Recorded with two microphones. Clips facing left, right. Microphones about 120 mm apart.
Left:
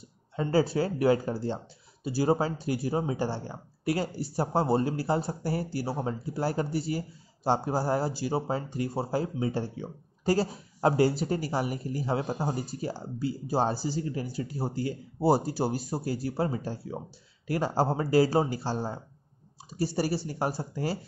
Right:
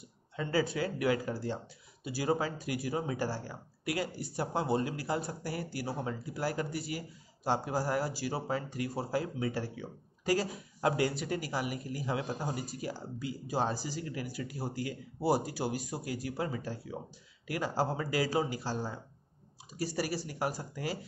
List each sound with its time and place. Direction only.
0.4 s speech: 35° left (ahead or behind)